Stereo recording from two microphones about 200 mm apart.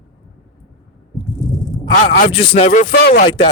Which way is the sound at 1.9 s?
40° left (ahead or behind).